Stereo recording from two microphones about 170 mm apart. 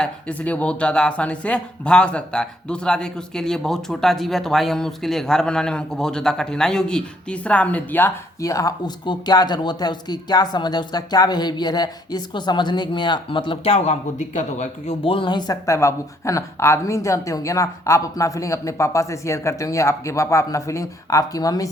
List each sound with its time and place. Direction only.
0.0 s speech: 10° left (ahead or behind)